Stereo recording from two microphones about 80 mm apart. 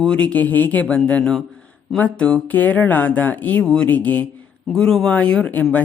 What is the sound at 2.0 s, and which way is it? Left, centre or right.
Speech, centre.